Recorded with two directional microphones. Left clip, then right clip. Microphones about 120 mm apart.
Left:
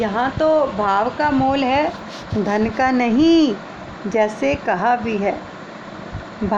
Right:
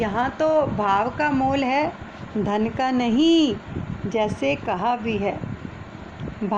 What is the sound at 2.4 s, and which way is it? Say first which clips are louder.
A woman's voice: left 5 dB; 40° right (ahead or behind).